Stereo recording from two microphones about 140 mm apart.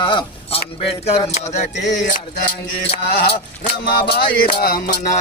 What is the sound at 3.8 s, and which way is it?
Music, 90° left.